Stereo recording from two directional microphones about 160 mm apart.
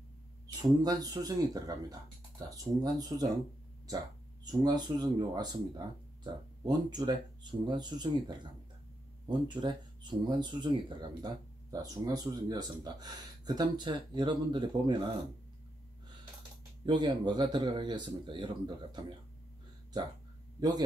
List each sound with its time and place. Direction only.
0.6 s speech: 25° right (ahead or behind)
4.5 s speech: 25° right (ahead or behind)
9.3 s speech: 30° right (ahead or behind)
16.8 s speech: 30° right (ahead or behind)